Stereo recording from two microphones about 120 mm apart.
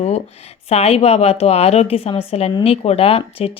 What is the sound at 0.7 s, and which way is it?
A woman's voice, 55° left (ahead or behind).